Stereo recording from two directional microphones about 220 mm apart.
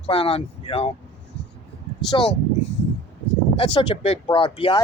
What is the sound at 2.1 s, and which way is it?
Speech, 25° left (ahead or behind).